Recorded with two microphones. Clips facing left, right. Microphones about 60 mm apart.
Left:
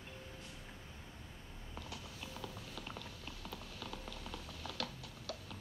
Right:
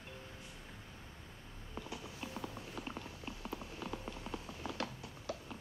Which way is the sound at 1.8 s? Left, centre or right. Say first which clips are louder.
Right 4 dB; right.